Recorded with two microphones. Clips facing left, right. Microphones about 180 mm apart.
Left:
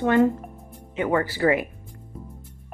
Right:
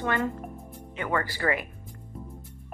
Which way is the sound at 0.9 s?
15° left (ahead or behind).